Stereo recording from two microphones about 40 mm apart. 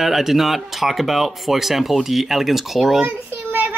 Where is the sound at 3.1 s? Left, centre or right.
Right.